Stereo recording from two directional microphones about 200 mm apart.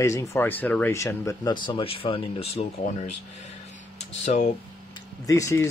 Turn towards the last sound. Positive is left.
turn(degrees=15)  # may be behind; listen again after turning